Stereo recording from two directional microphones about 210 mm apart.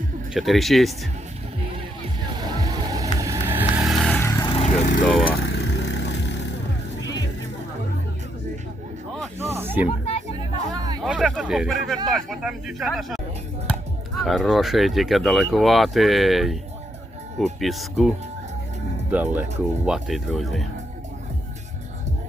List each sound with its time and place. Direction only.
0.3 s speech: centre (ahead or behind)
2.6 s music: 15° right (ahead or behind)
3.2 s vehicle: 15° right (ahead or behind)
4.2 s vehicle: 15° left (ahead or behind); by 5.0 s 35° left (ahead or behind)
5.0 s speech: centre (ahead or behind)
5.5 s vehicle: 55° left (ahead or behind)
9.4 s snake: 10° right (ahead or behind)
9.8 s a sound: 35° left (ahead or behind)
11.0 s speech: centre (ahead or behind)
14.2 s speech: centre (ahead or behind)
17.6 s speech: centre (ahead or behind)
19.1 s speech: 10° right (ahead or behind)